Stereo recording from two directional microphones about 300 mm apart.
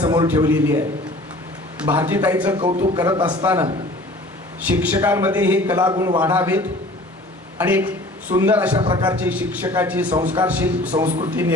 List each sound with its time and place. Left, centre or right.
0.0 s a man's voice: centre
1.9 s a man's voice: centre
2.6 s a man's voice: right
10.1 s a man's voice: centre
10.3 s a man's voice: centre